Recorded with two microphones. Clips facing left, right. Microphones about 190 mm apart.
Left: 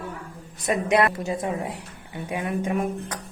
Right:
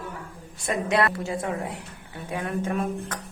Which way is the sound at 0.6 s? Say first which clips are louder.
Left 3 dB; 20° left (ahead or behind).